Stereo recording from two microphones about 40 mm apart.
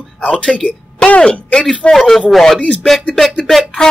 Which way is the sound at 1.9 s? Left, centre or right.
Centre.